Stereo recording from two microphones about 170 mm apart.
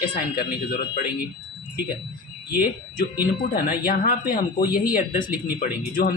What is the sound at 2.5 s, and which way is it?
Speech, 60° left (ahead or behind).